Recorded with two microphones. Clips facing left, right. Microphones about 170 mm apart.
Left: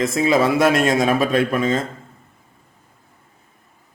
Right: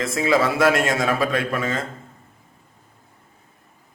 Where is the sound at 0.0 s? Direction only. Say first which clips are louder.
Left 3 dB; 20° left (ahead or behind).